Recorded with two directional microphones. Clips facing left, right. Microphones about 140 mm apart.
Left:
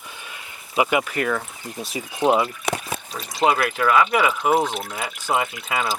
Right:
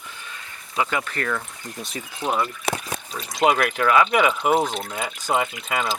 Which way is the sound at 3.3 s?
5° left (ahead or behind).